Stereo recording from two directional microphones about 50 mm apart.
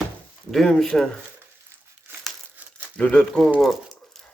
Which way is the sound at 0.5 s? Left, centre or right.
Centre.